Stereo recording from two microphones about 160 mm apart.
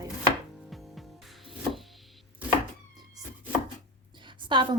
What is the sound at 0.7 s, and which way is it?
Music, centre (ahead or behind).